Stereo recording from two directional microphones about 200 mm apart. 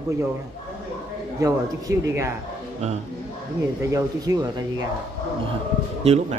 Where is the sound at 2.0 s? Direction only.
15° right (ahead or behind).